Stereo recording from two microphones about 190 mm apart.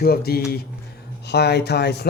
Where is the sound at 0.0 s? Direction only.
55° left (ahead or behind).